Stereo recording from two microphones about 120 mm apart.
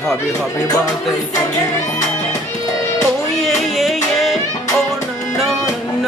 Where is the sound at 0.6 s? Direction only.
30° left (ahead or behind).